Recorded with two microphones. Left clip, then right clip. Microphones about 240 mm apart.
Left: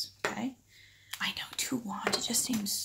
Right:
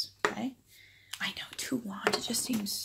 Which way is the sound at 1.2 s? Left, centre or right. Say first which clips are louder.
Left 2 dB; centre.